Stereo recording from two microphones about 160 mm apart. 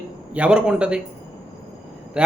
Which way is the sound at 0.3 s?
5° right (ahead or behind).